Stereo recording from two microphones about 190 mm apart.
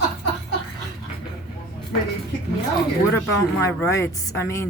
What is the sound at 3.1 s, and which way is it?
Speech, 15° left (ahead or behind).